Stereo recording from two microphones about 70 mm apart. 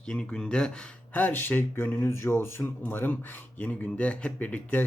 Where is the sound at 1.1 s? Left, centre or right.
Left.